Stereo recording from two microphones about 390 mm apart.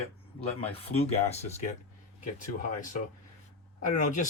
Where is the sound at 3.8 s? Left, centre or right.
Centre.